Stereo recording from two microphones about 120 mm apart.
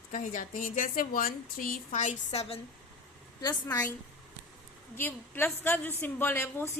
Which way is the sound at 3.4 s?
30° left (ahead or behind).